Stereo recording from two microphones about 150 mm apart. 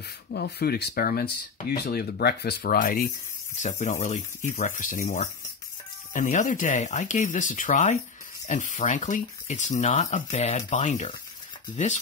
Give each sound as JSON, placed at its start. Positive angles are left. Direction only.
{"t": 0.3, "sound": "speech", "side_deg": 90}
{"t": 3.5, "sound": "speech", "side_deg": 55}